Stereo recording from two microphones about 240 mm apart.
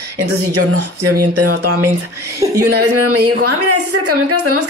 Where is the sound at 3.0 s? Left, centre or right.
Right.